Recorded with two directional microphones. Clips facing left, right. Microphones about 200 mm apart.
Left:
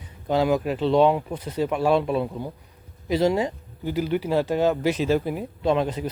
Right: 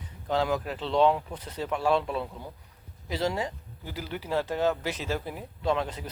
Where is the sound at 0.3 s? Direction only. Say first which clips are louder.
Left 6 dB; 15° left (ahead or behind).